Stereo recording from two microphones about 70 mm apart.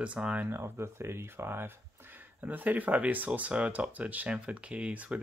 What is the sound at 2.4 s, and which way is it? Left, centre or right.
Speech, right.